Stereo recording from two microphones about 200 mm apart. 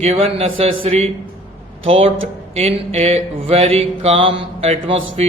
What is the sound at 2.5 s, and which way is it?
Mantra, 30° right (ahead or behind).